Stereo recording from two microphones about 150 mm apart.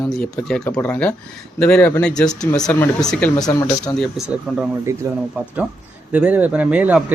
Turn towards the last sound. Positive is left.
turn(degrees=-10)  # may be behind; listen again after turning